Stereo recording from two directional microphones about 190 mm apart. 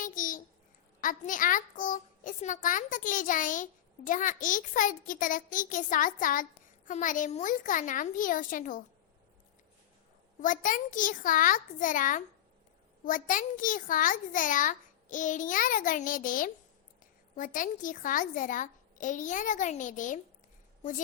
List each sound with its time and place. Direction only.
0.0 s babbling: 45° left (ahead or behind)
1.0 s a child's voice: 45° left (ahead or behind)
10.4 s a child's voice: 45° left (ahead or behind)